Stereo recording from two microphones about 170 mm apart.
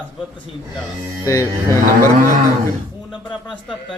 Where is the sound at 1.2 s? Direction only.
15° left (ahead or behind).